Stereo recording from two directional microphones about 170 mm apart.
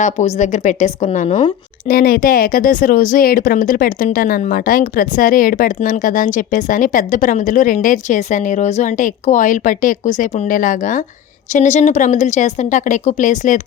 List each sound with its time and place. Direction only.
0.0 s speech: 45° left (ahead or behind)
1.9 s speech: 60° left (ahead or behind)